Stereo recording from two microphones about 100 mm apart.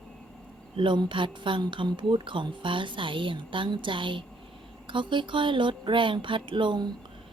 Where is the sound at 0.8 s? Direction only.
55° right (ahead or behind).